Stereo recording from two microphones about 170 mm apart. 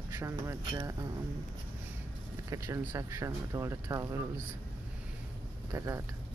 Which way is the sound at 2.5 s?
15° right (ahead or behind).